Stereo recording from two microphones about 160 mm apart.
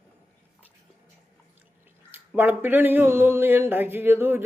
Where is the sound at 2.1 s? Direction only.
10° right (ahead or behind).